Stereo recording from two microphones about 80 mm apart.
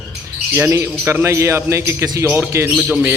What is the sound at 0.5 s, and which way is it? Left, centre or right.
A man's voice, right.